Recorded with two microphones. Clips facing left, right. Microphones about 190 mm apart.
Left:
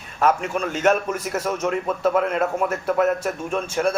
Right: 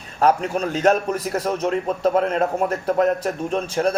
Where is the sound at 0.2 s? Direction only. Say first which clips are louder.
Right 2 dB; 35° right (ahead or behind).